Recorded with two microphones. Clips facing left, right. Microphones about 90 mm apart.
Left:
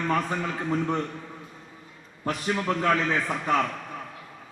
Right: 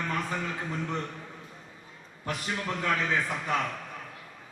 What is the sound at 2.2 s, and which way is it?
Speech, 40° left (ahead or behind).